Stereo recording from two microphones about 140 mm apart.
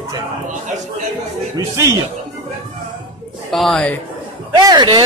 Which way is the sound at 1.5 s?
25° right (ahead or behind).